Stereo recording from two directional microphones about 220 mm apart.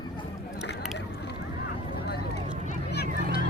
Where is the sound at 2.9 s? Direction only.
50° left (ahead or behind).